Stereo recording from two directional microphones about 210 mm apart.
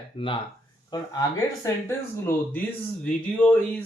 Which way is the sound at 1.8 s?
10° left (ahead or behind).